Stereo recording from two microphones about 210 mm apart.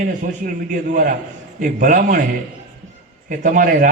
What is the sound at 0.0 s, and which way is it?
A man's voice, 40° right (ahead or behind).